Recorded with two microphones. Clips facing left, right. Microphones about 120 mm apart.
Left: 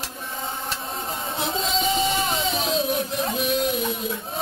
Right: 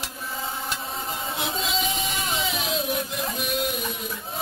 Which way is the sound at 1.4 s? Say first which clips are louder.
Left 4 dB; centre (ahead or behind).